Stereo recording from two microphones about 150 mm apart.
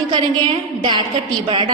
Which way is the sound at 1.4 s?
30° right (ahead or behind).